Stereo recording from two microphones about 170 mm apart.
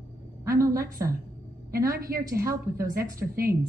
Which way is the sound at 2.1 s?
60° right (ahead or behind).